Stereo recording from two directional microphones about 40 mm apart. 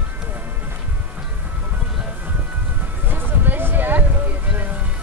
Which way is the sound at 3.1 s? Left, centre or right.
Right.